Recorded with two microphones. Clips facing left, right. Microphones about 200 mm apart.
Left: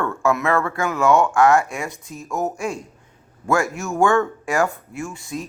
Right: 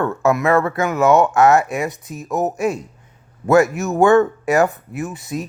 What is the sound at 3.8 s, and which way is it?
Speech, 20° right (ahead or behind).